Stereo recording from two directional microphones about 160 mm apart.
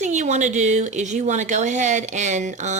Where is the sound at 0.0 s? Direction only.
50° right (ahead or behind).